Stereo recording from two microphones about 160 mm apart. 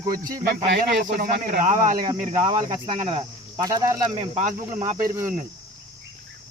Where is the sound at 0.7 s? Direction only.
80° right; by 2.0 s 55° right (ahead or behind).